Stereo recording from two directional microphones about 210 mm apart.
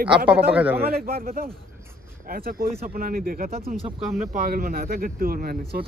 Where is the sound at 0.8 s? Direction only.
45° right (ahead or behind).